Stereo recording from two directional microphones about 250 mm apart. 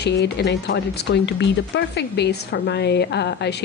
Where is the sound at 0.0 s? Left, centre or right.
Left.